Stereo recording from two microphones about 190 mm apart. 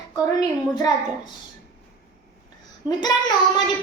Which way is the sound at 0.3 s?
20° left (ahead or behind).